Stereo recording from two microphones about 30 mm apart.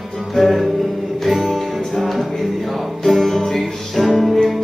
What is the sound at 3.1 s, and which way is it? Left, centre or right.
Music, centre.